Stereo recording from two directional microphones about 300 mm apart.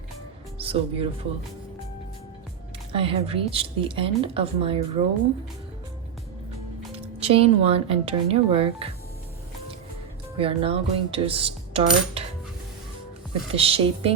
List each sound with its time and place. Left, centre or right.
0.6 s speech: centre
2.9 s speech: centre
6.9 s speech: centre
10.3 s speech: centre
13.6 s speech: centre